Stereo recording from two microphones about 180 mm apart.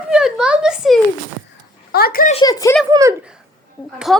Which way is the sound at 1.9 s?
55° left (ahead or behind).